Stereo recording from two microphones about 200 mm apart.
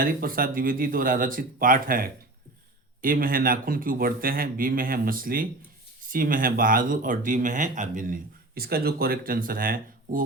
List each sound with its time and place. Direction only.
0.0 s speech: 45° right (ahead or behind)